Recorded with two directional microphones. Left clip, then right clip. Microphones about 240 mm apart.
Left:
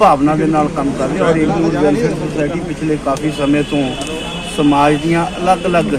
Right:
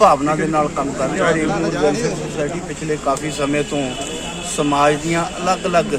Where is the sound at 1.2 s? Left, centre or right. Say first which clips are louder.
Left 5 dB; right.